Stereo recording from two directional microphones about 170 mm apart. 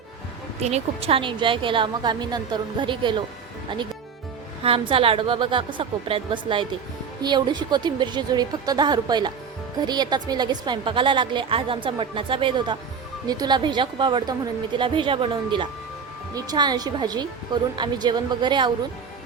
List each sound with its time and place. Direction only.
0.6 s a woman's voice: 40° right (ahead or behind)
4.6 s a woman's voice: 35° right (ahead or behind)